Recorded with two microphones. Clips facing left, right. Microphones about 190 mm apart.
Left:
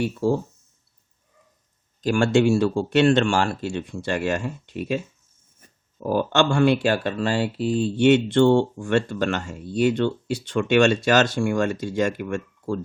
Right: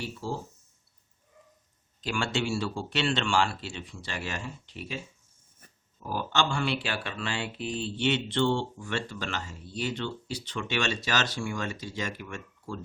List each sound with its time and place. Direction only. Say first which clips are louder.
2.0 s speech: left 12 dB; 45° left (ahead or behind)